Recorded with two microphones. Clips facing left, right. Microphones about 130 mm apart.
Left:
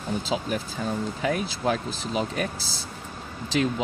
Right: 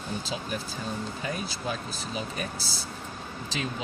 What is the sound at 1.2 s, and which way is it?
Speech, 85° left.